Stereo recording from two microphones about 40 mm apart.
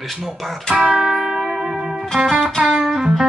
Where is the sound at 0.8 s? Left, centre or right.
Centre.